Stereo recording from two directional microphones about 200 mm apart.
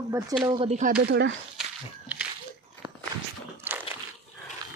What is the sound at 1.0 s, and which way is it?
Speech, 55° right (ahead or behind).